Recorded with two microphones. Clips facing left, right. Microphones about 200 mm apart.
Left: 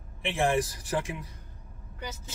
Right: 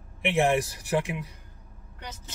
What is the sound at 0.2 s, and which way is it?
Speech, 20° right (ahead or behind).